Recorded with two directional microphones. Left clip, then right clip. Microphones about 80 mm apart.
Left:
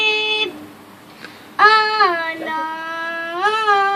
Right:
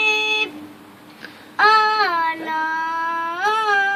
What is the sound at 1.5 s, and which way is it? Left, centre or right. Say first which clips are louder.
Child singing: left 2 dB; left.